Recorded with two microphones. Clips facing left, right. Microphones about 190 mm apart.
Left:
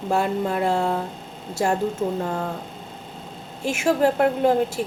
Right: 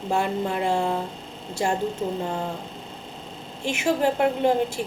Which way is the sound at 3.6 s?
5° left (ahead or behind).